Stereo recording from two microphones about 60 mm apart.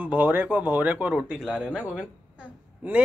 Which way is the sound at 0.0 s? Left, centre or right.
Right.